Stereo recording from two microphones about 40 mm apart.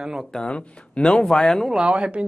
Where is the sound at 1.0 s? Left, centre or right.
Centre.